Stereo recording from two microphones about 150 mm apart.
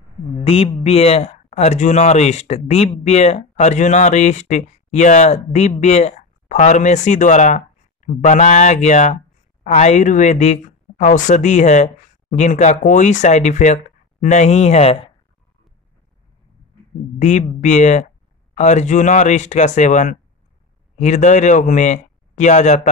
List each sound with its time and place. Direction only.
0.4 s speech: 40° left (ahead or behind)
17.2 s speech: 55° left (ahead or behind)